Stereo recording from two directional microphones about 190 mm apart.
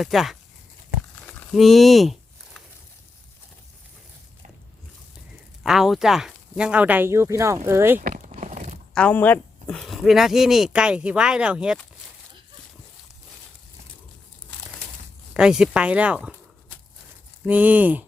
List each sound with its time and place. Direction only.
0.0 s speech: centre (ahead or behind)
1.3 s a sound: 5° left (ahead or behind)
5.6 s speech: centre (ahead or behind)
7.9 s a sound: 40° right (ahead or behind)
9.0 s speech: 10° left (ahead or behind)
15.3 s speech: 5° right (ahead or behind)
17.4 s speech: 10° right (ahead or behind)